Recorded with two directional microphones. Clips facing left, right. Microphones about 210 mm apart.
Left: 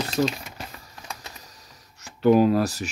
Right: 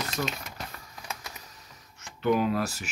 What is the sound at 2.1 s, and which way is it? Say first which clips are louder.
Speech: left 8 dB; 35° left (ahead or behind).